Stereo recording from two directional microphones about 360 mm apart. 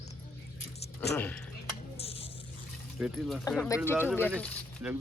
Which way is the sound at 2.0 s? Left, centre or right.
Centre.